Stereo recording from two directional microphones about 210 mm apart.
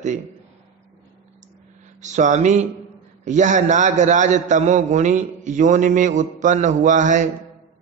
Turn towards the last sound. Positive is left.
turn(degrees=-35)  # may be behind; listen again after turning